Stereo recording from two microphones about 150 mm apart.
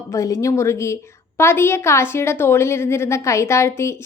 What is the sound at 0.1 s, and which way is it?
A woman's voice, 20° left (ahead or behind).